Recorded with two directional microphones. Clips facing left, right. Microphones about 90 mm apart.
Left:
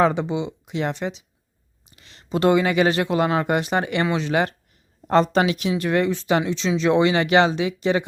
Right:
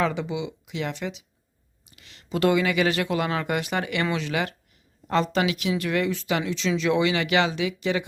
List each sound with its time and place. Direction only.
0.0 s speech: 35° left (ahead or behind)